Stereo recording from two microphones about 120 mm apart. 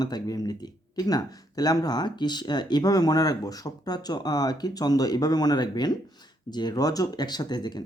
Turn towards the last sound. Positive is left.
turn(degrees=35)  # may be behind; listen again after turning